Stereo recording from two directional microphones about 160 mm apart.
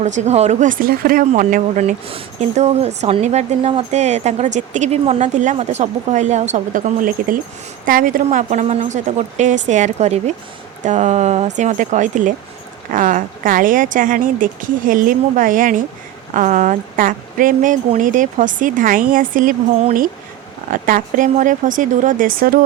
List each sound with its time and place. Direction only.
0.0 s speech: 45° right (ahead or behind)
2.0 s speech: 40° right (ahead or behind); by 19.5 s 55° right (ahead or behind)
20.7 s speech: 60° right (ahead or behind)